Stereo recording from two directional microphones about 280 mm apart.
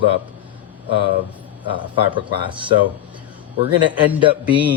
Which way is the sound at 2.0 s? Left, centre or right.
Centre.